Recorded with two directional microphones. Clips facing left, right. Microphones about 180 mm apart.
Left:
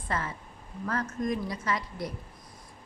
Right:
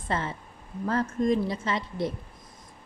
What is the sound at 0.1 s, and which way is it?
A woman's voice, 25° right (ahead or behind).